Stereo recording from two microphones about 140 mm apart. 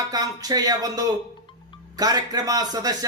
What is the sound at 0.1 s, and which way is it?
A man's voice, 25° right (ahead or behind).